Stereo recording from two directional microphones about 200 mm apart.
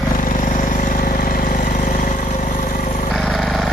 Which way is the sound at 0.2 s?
40° left (ahead or behind).